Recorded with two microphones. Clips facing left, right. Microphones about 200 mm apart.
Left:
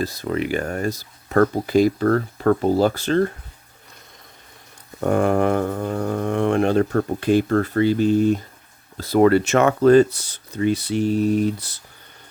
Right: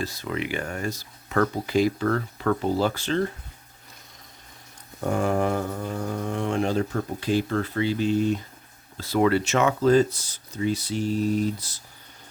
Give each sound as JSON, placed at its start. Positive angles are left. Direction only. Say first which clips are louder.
{"t": 0.0, "sound": "speech", "louder": "left 6 dB", "side_deg": 40}
{"t": 4.9, "sound": "speech", "louder": "left 6 dB", "side_deg": 60}